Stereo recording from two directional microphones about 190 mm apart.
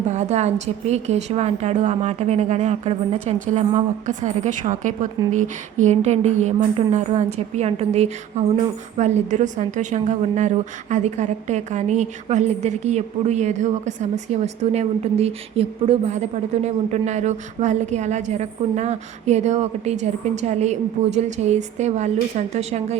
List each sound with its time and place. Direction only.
0.1 s a woman's voice: 35° right (ahead or behind)